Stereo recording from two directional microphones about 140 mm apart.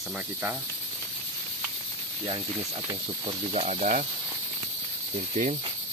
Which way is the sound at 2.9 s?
45° right (ahead or behind).